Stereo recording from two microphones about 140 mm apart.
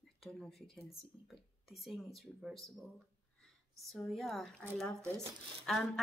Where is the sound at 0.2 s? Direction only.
Centre (ahead or behind).